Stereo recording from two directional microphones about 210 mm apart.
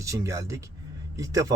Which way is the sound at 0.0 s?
15° right (ahead or behind).